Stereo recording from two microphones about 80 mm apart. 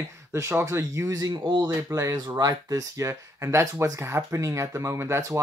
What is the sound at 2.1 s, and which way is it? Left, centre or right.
Speech, right.